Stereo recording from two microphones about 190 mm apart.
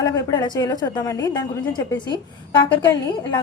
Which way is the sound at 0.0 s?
20° left (ahead or behind).